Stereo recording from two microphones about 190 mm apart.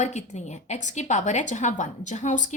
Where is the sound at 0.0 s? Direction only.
35° left (ahead or behind).